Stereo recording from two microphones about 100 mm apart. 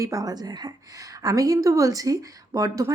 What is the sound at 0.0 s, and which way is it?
A woman's voice, 35° right (ahead or behind).